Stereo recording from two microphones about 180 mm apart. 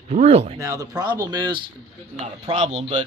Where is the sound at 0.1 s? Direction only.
40° right (ahead or behind).